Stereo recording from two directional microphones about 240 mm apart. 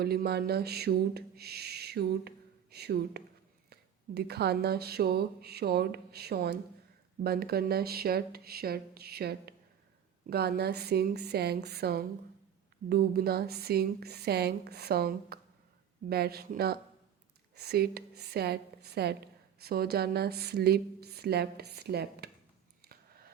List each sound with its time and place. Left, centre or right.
0.0 s a woman's voice: right